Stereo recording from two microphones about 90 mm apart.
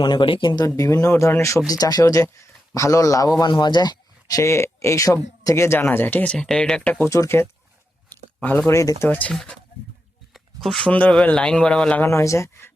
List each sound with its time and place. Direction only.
0.0 s speech: 60° left (ahead or behind)
0.8 s speech: 35° left (ahead or behind); by 7.0 s 10° left (ahead or behind)
7.1 s speech: 30° left (ahead or behind)
8.1 s a sound: 20° left (ahead or behind)
8.7 s speech: 35° left (ahead or behind)
9.0 s speech: 20° left (ahead or behind)
9.3 s speech: 5° left (ahead or behind)
10.3 s a sound: centre (ahead or behind)
10.8 s a man's voice: 15° left (ahead or behind)
12.0 s speech: 35° left (ahead or behind)